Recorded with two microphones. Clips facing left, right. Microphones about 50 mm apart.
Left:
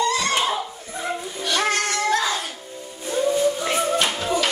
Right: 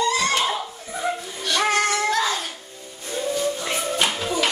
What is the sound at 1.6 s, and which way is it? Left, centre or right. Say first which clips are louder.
Synthetic singing: right 2 dB; centre.